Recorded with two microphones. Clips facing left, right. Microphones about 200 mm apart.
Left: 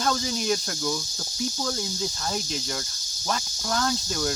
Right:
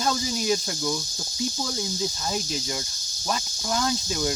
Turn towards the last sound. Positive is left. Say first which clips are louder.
# right 1 dB
turn(degrees=-10)  # may be behind; listen again after turning